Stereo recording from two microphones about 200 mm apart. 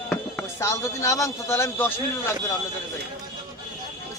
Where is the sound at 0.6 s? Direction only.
15° left (ahead or behind).